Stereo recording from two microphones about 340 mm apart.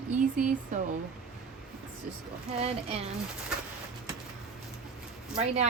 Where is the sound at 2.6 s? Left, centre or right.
Centre.